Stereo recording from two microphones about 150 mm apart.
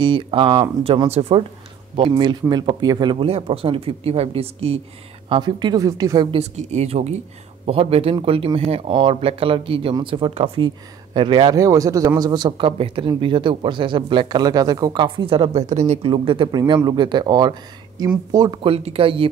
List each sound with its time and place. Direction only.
0.0 s speech: 35° right (ahead or behind)
5.3 s speech: 30° right (ahead or behind)
6.3 s speech: 45° right (ahead or behind)
16.1 s speech: 35° right (ahead or behind)
18.6 s speech: 40° right (ahead or behind)